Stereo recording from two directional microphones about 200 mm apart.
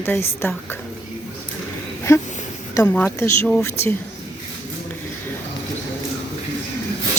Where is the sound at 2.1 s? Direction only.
15° left (ahead or behind).